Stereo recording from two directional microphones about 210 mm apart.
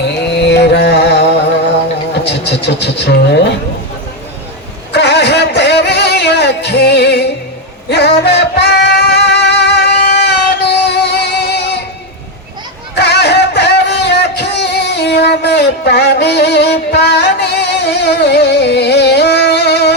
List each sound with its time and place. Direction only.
0.0 s carnatic music: 55° left (ahead or behind)
2.2 s speech: 55° left (ahead or behind)
4.9 s a sound: 55° left (ahead or behind)
7.9 s music: 50° left (ahead or behind)
13.0 s music: 50° left (ahead or behind)